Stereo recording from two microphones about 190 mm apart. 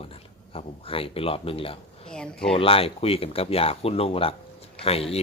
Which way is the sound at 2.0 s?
5° left (ahead or behind).